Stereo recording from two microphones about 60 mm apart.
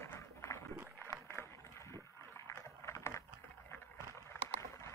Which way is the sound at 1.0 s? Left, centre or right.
Left.